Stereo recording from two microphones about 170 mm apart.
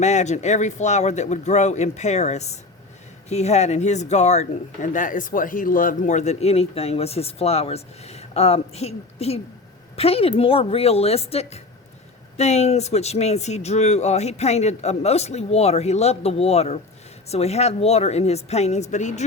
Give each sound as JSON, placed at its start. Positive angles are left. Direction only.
{"t": 0.0, "sound": "speech", "side_deg": 40}